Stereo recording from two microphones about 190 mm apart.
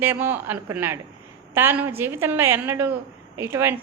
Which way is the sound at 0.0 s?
10° right (ahead or behind).